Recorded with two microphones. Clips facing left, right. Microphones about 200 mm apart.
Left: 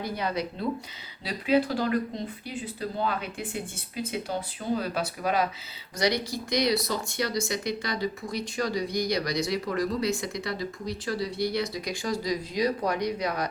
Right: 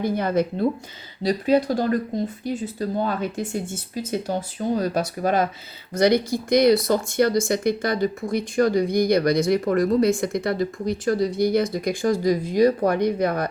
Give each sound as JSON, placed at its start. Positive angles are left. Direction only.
{"t": 0.0, "sound": "speech", "side_deg": -50}